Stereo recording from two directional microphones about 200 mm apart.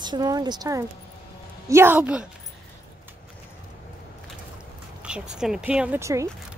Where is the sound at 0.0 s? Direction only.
20° right (ahead or behind).